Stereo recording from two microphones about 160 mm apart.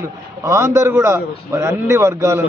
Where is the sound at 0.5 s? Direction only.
20° right (ahead or behind).